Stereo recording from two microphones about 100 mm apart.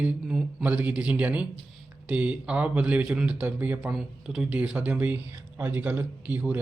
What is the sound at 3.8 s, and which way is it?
Speech, 5° right (ahead or behind).